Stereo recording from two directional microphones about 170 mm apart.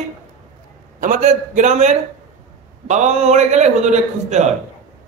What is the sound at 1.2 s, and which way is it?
A man's voice, 45° right (ahead or behind).